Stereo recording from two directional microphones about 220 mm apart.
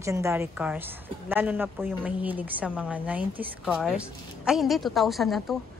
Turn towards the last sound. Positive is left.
turn(degrees=0)  # may be behind; listen again after turning